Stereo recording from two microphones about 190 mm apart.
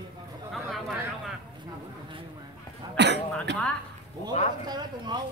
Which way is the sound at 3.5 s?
65° right (ahead or behind).